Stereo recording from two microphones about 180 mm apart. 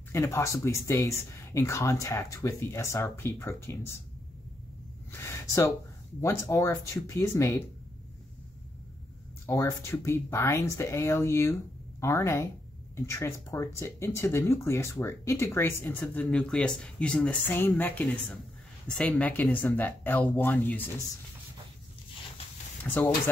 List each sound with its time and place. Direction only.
0.1 s speech: 15° left (ahead or behind)
5.2 s speech: 15° left (ahead or behind)
9.5 s speech: 15° left (ahead or behind)
22.8 s speech: 10° left (ahead or behind)